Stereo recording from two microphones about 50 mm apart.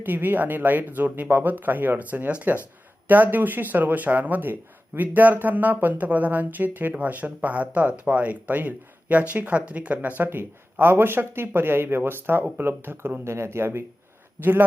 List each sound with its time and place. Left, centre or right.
0.0 s speech: right
10.2 s speech: right
13.3 s speech: right
14.4 s speech: right